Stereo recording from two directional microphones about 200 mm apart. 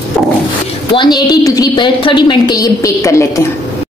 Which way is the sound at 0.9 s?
20° left (ahead or behind).